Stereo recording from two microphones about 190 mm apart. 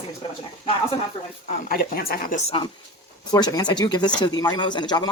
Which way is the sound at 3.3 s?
20° left (ahead or behind).